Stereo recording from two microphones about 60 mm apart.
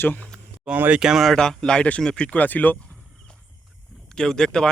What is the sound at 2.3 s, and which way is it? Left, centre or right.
Speech, left.